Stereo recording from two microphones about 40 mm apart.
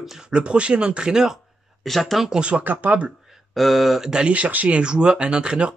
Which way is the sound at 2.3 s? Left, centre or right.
Right.